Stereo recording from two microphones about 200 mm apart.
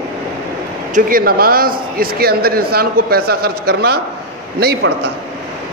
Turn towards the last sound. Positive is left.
turn(degrees=-55)  # may be behind; listen again after turning